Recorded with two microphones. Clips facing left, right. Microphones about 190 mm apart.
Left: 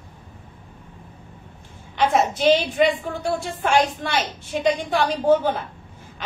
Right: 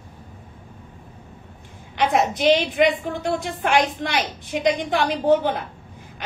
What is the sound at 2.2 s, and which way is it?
A woman's voice, 15° right (ahead or behind).